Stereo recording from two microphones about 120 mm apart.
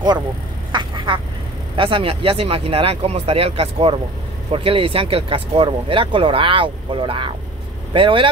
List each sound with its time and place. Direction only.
0.7 s quack: 40° right (ahead or behind)
1.8 s speech: 50° right (ahead or behind)